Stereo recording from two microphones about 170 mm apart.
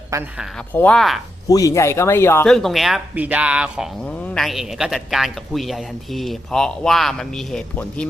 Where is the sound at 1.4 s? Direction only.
20° left (ahead or behind).